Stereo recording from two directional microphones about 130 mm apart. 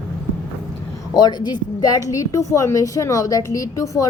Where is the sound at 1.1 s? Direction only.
35° left (ahead or behind).